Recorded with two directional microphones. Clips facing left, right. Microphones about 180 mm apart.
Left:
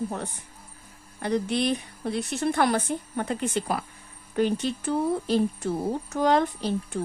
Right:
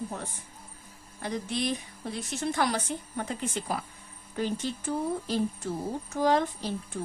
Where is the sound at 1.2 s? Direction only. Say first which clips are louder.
Left 6 dB; 65° left (ahead or behind).